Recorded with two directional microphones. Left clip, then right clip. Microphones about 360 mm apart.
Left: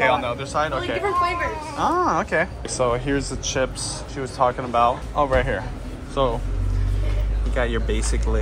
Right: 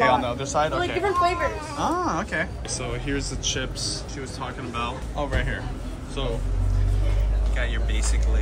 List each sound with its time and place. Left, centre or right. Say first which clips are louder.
0.0 s a man's voice: left 1 dB; centre
1.2 s speech: even; right
1.8 s speech: left 5 dB; centre
7.5 s speech: left 8 dB; centre